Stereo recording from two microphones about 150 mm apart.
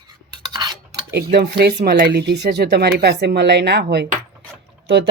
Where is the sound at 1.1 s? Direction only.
90° right.